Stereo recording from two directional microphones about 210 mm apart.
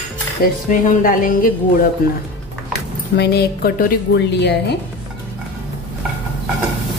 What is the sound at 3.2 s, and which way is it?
A woman's voice, 50° left (ahead or behind).